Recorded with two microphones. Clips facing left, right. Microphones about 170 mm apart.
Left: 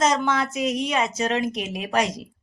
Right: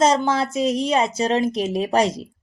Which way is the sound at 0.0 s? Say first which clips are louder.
Right 4 dB; 30° right (ahead or behind).